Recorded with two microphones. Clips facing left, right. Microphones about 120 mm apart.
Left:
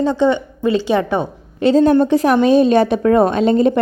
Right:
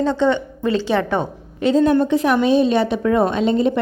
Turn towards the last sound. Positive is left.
turn(degrees=50)  # may be behind; listen again after turning